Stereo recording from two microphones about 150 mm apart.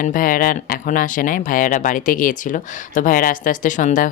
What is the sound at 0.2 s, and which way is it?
Speech, 65° left (ahead or behind).